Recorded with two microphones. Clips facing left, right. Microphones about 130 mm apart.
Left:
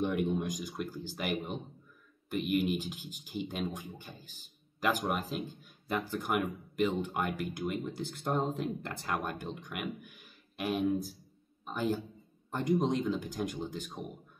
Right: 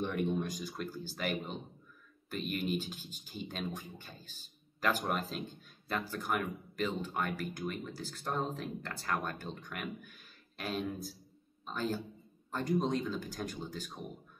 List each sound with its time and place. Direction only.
0.0 s a man's voice: 15° left (ahead or behind)